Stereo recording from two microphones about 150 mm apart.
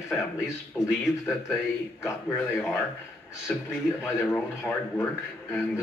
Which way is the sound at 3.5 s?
5° left (ahead or behind).